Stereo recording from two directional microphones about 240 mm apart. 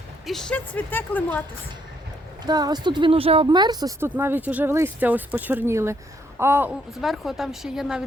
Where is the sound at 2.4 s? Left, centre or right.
Centre.